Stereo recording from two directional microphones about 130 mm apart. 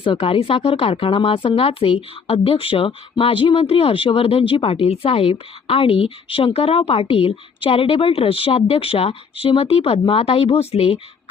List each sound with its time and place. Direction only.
0.0 s speech: 45° left (ahead or behind)